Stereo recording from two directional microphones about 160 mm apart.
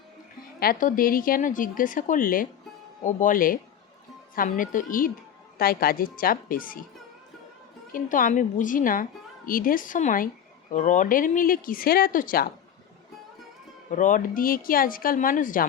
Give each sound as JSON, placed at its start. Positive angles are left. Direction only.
{"t": 0.6, "sound": "speech", "side_deg": 60}
{"t": 7.9, "sound": "speech", "side_deg": 55}
{"t": 13.9, "sound": "speech", "side_deg": 55}